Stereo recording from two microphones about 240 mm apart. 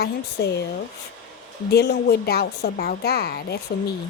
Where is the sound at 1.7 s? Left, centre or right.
Left.